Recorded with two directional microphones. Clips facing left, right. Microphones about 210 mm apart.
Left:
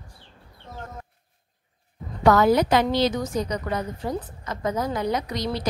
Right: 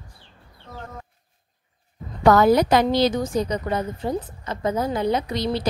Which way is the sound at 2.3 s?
40° right (ahead or behind).